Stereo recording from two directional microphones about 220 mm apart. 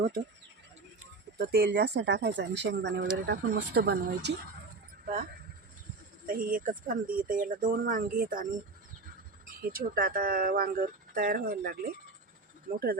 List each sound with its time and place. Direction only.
1.4 s speech: 45° right (ahead or behind)
5.0 s speech: 40° right (ahead or behind)
9.6 s speech: 40° right (ahead or behind)